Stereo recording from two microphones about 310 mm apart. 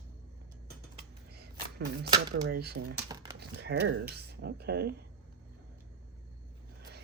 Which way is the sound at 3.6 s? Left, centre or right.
Right.